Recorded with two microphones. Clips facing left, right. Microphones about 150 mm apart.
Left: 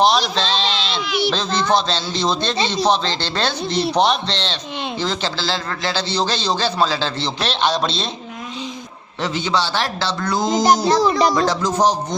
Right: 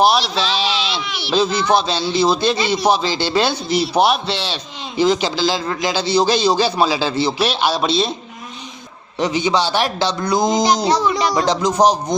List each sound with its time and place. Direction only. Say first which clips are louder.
0.0 s a sound: right 1 dB; 5° right (ahead or behind)
1.3 s a man's voice: right 6 dB; 10° right (ahead or behind)
9.2 s a man's voice: right 3 dB; 15° right (ahead or behind)